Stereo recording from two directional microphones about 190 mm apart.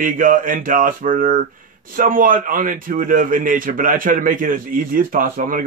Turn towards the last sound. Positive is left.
turn(degrees=-45)  # may be behind; listen again after turning